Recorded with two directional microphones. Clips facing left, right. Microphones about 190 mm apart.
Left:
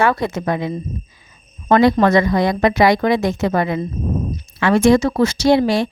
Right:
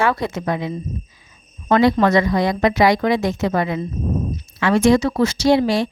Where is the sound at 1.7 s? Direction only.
50° left (ahead or behind).